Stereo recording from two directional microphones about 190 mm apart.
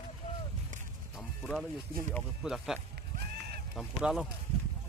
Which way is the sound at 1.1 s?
Centre (ahead or behind).